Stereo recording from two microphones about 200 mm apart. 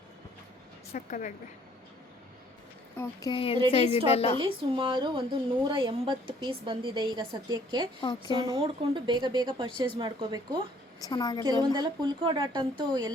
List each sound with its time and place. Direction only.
0.9 s a woman's voice: 40° left (ahead or behind)
3.0 s a woman's voice: 20° left (ahead or behind)
4.4 s a woman's voice: 25° right (ahead or behind)
11.0 s a woman's voice: 20° left (ahead or behind)
11.8 s a woman's voice: 25° right (ahead or behind)